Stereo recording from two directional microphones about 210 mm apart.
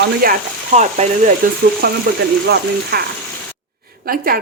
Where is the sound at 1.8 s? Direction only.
45° right (ahead or behind).